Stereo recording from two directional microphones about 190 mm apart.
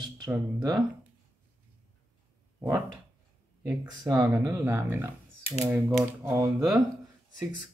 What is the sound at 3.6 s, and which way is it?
Speech, 20° right (ahead or behind).